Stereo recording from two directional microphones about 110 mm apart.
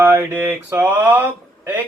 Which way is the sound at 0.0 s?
20° right (ahead or behind).